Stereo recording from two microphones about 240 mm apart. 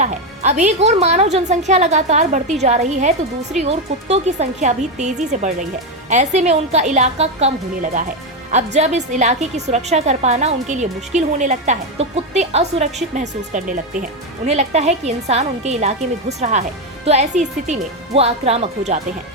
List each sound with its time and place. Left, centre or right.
0.0 s a woman's voice: right